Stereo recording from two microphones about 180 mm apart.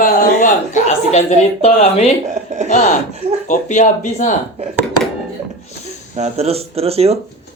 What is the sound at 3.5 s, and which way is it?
Speech, 45° left (ahead or behind).